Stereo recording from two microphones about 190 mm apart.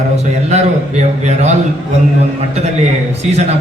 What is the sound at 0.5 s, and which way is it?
A man's voice, 35° right (ahead or behind).